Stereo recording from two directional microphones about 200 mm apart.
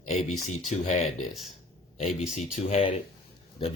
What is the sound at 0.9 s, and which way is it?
Speech, 35° left (ahead or behind).